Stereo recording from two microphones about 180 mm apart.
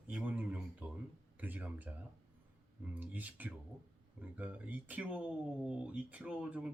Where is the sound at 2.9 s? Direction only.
10° right (ahead or behind).